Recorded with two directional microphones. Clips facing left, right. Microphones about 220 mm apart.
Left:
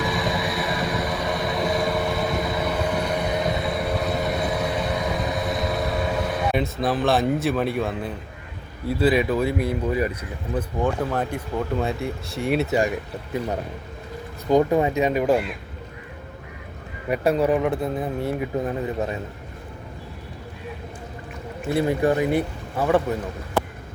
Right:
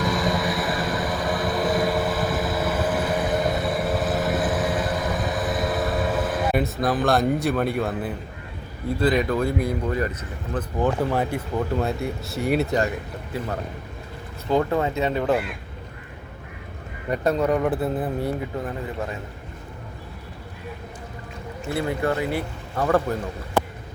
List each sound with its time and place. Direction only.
0.0 s vehicle: centre (ahead or behind)
9.0 s speech: 5° left (ahead or behind)
10.8 s speech: 5° right (ahead or behind)
14.5 s speech: 15° left (ahead or behind)
17.1 s speech: 10° left (ahead or behind)
17.7 s speech: 5° right (ahead or behind)
18.3 s a man's voice: 20° left (ahead or behind)
21.7 s a man's voice: 20° left (ahead or behind)
22.8 s speech: 5° left (ahead or behind)